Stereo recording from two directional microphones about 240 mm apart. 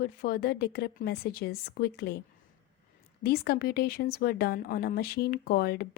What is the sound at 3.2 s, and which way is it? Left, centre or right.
Speech, left.